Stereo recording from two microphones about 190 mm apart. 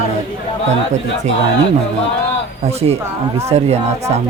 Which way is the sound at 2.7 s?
35° right (ahead or behind).